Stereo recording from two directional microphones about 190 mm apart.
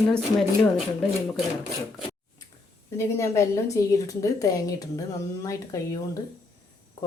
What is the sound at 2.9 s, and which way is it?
A woman's voice, 15° left (ahead or behind).